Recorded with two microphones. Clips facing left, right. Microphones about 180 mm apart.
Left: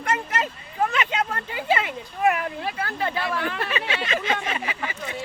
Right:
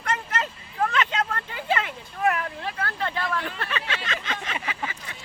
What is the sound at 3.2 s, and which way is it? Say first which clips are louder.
Speech: left 2 dB; 70° left (ahead or behind).